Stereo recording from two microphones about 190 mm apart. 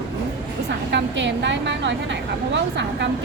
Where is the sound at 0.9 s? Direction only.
70° right (ahead or behind).